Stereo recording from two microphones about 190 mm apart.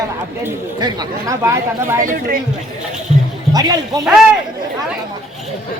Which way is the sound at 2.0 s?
45° right (ahead or behind).